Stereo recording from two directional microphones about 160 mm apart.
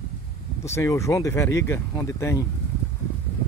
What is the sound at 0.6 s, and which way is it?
Speech, 20° left (ahead or behind).